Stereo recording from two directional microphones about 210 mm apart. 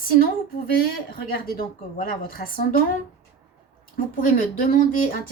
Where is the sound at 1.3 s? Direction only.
40° left (ahead or behind).